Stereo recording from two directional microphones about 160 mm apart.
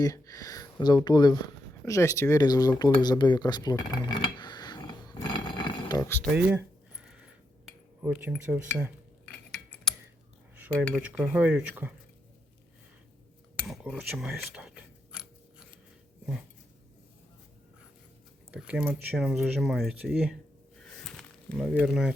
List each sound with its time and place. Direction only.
0.0 s speech: 20° left (ahead or behind)
1.8 s a sound: 20° left (ahead or behind)
6.0 s speech: 15° left (ahead or behind)
6.3 s a sound: 10° right (ahead or behind)
8.0 s speech: 10° right (ahead or behind)
10.6 s speech: 5° right (ahead or behind)
13.7 s speech: centre (ahead or behind)
18.5 s speech: 5° right (ahead or behind)